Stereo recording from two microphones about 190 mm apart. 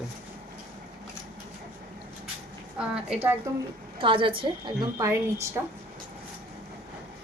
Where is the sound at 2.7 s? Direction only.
5° right (ahead or behind).